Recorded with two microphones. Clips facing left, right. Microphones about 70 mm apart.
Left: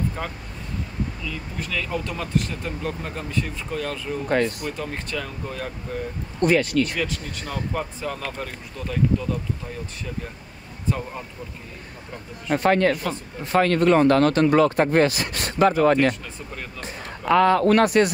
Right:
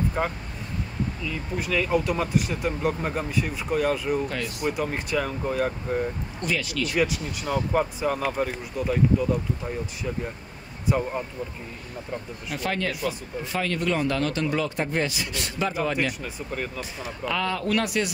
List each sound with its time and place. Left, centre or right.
0.2 s speech: centre
4.3 s speech: left
4.6 s speech: centre
6.4 s speech: left
7.0 s speech: centre
10.9 s speech: centre
12.4 s speech: left
16.5 s speech: centre
17.2 s speech: left